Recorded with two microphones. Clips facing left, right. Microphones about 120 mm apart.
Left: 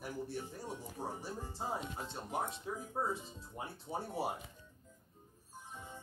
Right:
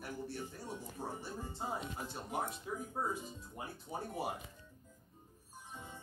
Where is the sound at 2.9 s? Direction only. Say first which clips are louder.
Left 2 dB; 25° left (ahead or behind).